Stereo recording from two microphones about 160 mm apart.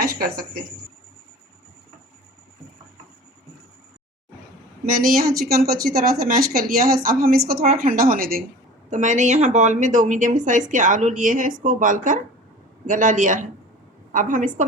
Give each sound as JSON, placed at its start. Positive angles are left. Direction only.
{"t": 0.0, "sound": "speech", "side_deg": -65}
{"t": 5.3, "sound": "a woman's voice", "side_deg": -65}
{"t": 8.9, "sound": "a woman's voice", "side_deg": -50}